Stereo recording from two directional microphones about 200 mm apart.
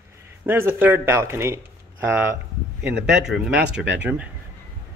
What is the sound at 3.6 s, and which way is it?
Speech, 60° right (ahead or behind).